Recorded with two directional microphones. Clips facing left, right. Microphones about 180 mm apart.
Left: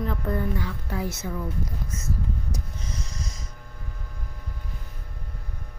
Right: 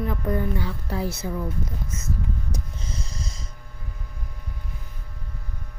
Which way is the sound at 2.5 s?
30° right (ahead or behind).